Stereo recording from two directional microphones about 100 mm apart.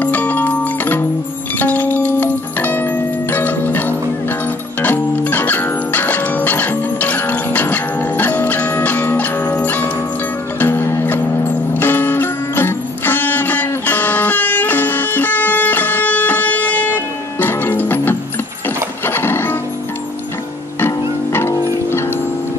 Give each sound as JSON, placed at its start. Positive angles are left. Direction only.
{"t": 0.0, "sound": "music", "side_deg": 15}
{"t": 20.8, "sound": "music", "side_deg": 25}